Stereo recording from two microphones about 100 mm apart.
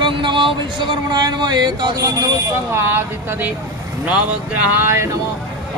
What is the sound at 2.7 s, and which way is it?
Speech, 25° right (ahead or behind).